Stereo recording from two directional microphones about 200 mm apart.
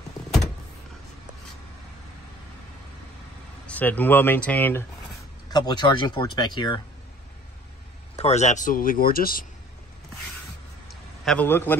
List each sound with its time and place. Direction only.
3.6 s speech: 10° left (ahead or behind)
5.5 s speech: 20° left (ahead or behind)
8.2 s speech: 35° left (ahead or behind)
10.9 s a sound: 5° left (ahead or behind)